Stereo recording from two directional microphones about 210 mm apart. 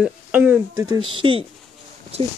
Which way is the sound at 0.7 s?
20° right (ahead or behind).